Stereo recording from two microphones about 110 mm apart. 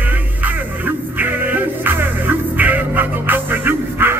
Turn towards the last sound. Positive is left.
turn(degrees=-20)  # may be behind; listen again after turning